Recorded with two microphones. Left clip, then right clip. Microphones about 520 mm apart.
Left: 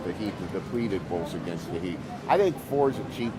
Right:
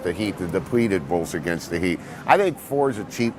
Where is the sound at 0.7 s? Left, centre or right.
Right.